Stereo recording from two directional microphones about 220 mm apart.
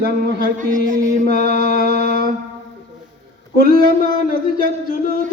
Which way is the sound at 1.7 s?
35° left (ahead or behind).